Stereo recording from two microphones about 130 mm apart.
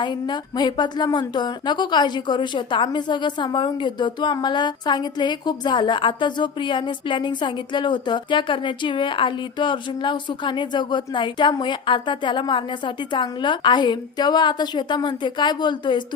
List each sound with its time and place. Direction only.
0.0 s speech: 35° left (ahead or behind)